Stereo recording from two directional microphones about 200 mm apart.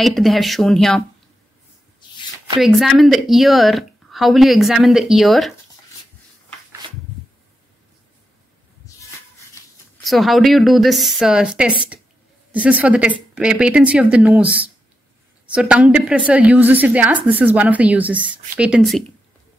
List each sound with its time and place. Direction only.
0.0 s speech: centre (ahead or behind)
2.0 s a sound: 25° left (ahead or behind)
2.6 s speech: centre (ahead or behind)
10.0 s speech: centre (ahead or behind)